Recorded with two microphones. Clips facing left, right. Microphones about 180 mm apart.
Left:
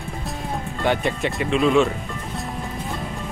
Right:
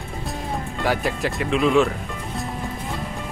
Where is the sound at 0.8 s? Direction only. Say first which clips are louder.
Left 2 dB; centre (ahead or behind).